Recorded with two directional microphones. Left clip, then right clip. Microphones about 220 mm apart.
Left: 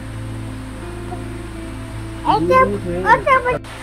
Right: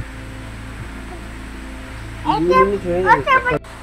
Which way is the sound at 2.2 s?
50° left (ahead or behind).